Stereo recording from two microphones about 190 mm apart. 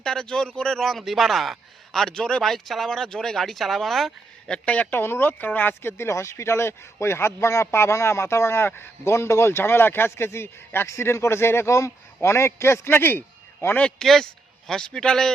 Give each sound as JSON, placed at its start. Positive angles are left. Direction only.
{"t": 0.0, "sound": "a man's voice", "side_deg": 5}